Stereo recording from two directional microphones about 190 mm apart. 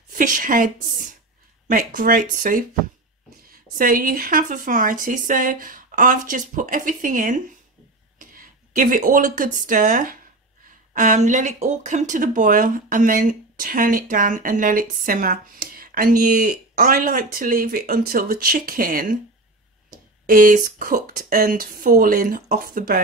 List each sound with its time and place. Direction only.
0.1 s speech: 45° right (ahead or behind)
20.2 s speech: 50° right (ahead or behind)